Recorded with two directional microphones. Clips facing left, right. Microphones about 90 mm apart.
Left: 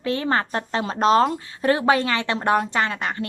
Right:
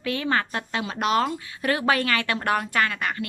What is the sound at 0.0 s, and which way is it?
A woman's voice, 30° left (ahead or behind).